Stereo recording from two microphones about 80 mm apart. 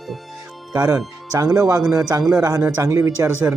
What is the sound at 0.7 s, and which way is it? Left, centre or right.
Speech, right.